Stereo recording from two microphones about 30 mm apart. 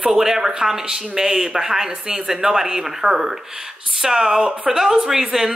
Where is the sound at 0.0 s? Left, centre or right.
Centre.